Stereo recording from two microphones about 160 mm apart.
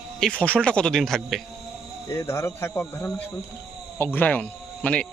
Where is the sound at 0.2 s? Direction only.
5° left (ahead or behind).